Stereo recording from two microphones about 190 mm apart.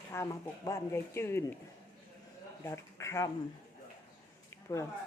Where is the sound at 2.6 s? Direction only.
15° left (ahead or behind).